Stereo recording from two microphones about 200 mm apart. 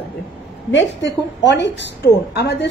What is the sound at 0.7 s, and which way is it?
A woman's voice, 65° left (ahead or behind).